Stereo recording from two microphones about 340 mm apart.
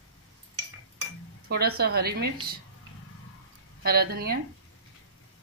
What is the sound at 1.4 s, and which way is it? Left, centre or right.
Speech, right.